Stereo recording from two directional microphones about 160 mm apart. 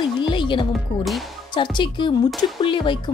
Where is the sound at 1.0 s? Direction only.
Centre (ahead or behind).